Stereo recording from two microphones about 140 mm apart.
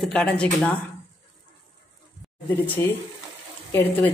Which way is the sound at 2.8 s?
20° left (ahead or behind).